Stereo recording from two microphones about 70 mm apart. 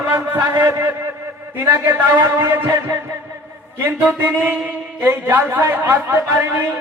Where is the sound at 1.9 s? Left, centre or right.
Right.